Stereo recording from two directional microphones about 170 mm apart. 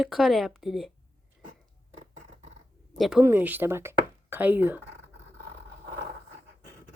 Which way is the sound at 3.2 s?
10° right (ahead or behind).